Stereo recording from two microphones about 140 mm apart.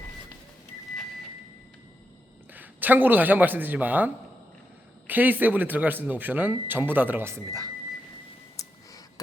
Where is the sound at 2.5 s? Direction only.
10° right (ahead or behind).